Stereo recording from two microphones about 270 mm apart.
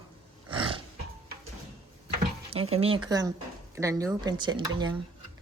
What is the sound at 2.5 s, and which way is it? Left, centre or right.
Speech, right.